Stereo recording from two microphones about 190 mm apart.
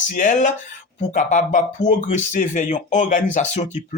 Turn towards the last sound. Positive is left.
turn(degrees=35)  # may be behind; listen again after turning